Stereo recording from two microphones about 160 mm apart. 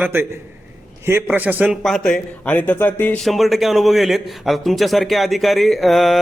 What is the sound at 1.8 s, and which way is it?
Speech, centre (ahead or behind).